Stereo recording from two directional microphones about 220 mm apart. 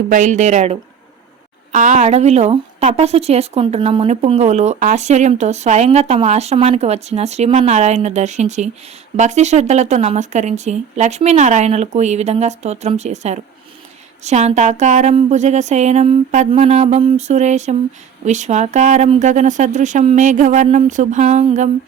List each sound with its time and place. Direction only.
0.1 s speech: 35° right (ahead or behind)